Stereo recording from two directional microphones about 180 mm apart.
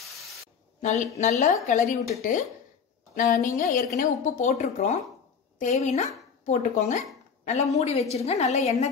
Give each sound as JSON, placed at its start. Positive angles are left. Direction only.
{"t": 0.7, "sound": "a woman's voice", "side_deg": 40}
{"t": 3.2, "sound": "a woman's voice", "side_deg": 45}